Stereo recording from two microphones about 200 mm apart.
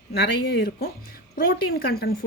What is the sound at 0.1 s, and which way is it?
Speech, 55° left (ahead or behind).